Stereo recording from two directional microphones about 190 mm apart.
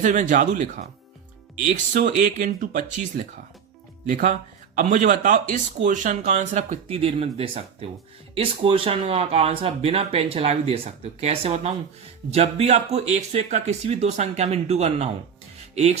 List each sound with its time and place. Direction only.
0.0 s speech: 40° right (ahead or behind)